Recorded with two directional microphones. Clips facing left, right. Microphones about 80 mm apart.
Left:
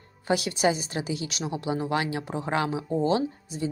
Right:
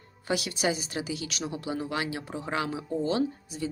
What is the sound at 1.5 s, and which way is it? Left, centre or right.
Speech, left.